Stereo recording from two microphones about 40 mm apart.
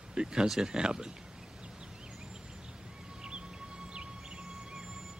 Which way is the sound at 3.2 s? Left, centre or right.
Right.